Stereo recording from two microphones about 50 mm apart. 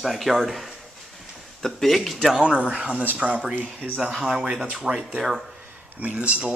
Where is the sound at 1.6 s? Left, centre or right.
Centre.